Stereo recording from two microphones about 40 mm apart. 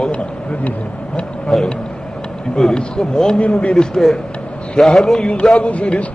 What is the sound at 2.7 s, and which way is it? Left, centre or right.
Speech, centre.